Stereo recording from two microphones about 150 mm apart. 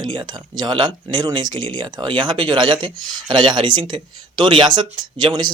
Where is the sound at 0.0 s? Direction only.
30° right (ahead or behind).